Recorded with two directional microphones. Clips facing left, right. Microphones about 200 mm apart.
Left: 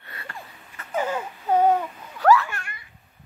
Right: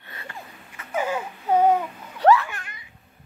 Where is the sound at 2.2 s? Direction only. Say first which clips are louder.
Right 1 dB; 20° right (ahead or behind).